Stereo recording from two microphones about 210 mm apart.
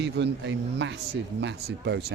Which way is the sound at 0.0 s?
55° right (ahead or behind).